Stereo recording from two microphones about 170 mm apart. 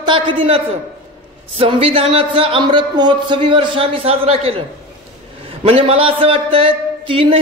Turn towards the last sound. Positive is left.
turn(degrees=-30)  # may be behind; listen again after turning